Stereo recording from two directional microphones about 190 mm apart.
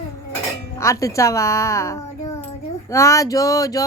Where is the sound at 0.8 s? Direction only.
15° left (ahead or behind).